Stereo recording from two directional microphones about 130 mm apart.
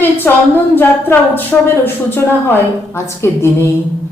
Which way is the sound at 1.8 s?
15° left (ahead or behind).